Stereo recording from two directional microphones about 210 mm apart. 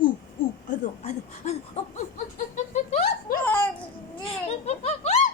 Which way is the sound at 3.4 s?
10° left (ahead or behind).